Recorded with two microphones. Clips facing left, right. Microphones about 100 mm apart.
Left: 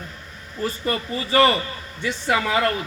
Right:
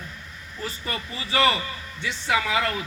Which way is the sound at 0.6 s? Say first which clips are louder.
Left 7 dB; 40° left (ahead or behind).